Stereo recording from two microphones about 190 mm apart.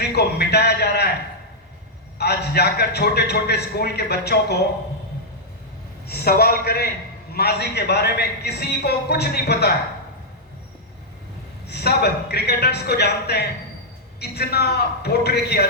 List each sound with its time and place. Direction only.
0.0 s a sound: 60° left (ahead or behind)
2.1 s a man's voice: 60° left (ahead or behind)
6.1 s a man's voice: 55° left (ahead or behind)
11.7 s a man's voice: 60° left (ahead or behind)